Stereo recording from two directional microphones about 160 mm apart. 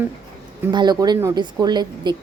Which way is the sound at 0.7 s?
25° right (ahead or behind).